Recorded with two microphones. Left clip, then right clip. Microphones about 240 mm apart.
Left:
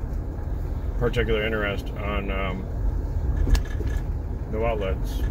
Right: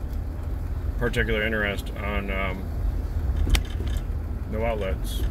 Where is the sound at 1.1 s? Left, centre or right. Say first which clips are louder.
Right 1 dB; right.